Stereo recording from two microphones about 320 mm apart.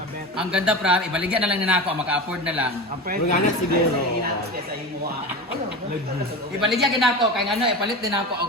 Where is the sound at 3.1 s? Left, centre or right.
Right.